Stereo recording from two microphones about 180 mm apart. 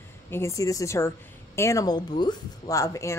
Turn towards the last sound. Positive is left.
turn(degrees=15)  # may be behind; listen again after turning